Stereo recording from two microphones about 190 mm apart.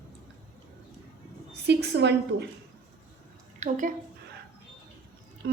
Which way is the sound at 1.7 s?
65° right (ahead or behind).